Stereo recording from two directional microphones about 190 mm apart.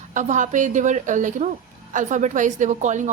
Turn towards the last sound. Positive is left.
turn(degrees=-40)  # may be behind; listen again after turning